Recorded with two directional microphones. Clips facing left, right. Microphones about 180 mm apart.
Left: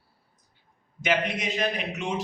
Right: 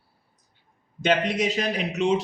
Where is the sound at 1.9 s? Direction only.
75° right (ahead or behind).